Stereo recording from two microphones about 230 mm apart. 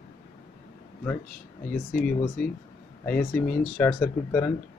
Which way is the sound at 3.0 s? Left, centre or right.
Centre.